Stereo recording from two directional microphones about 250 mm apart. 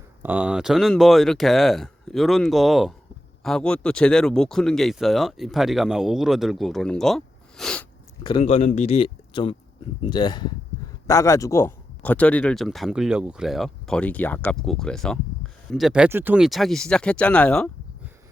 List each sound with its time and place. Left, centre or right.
0.2 s speech: centre
8.2 s speech: left; by 17.7 s centre